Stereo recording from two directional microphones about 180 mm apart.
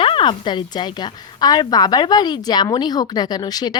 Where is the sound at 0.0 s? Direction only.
30° left (ahead or behind).